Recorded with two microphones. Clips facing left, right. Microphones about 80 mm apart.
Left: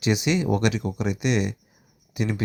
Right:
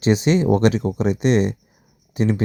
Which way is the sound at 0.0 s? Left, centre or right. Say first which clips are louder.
Right 6 dB; right.